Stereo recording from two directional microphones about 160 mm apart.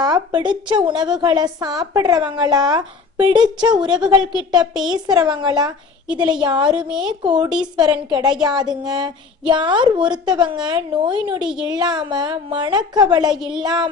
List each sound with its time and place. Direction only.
0.0 s a woman's voice: 25° right (ahead or behind)
3.8 s a woman's voice: 5° right (ahead or behind)
4.2 s a woman's voice: 25° right (ahead or behind)
6.7 s a woman's voice: 5° right (ahead or behind)
7.0 s a woman's voice: 30° right (ahead or behind)
13.3 s a woman's voice: 5° right (ahead or behind)
13.6 s a woman's voice: 25° right (ahead or behind)